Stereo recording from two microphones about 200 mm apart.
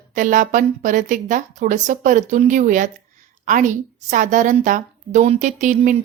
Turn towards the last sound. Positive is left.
turn(degrees=-40)  # may be behind; listen again after turning